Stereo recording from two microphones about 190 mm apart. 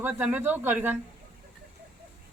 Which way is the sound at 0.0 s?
10° right (ahead or behind).